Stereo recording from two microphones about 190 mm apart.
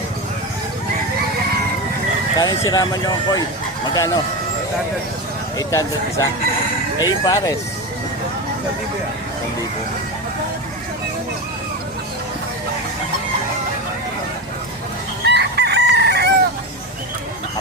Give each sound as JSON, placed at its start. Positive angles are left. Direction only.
{"t": 2.4, "sound": "speech", "side_deg": 20}
{"t": 5.5, "sound": "speech", "side_deg": 15}
{"t": 15.2, "sound": "chicken", "side_deg": -60}